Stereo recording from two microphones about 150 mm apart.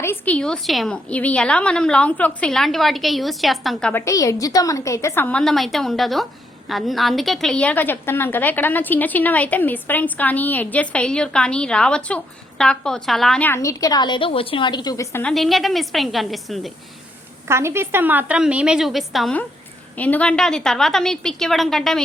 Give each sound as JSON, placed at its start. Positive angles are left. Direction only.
{"t": 0.0, "sound": "a woman's voice", "side_deg": 15}
{"t": 4.0, "sound": "a woman's voice", "side_deg": 20}
{"t": 13.5, "sound": "a woman's voice", "side_deg": 20}
{"t": 15.2, "sound": "a woman's voice", "side_deg": 0}
{"t": 17.5, "sound": "a woman's voice", "side_deg": -15}